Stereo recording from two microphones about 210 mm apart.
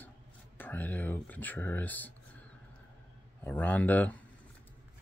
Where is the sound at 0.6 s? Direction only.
10° left (ahead or behind).